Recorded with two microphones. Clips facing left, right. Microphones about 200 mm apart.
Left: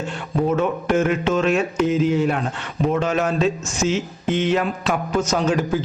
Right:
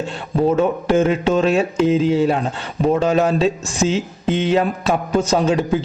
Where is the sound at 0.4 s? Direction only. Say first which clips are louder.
Right 4 dB; 30° right (ahead or behind).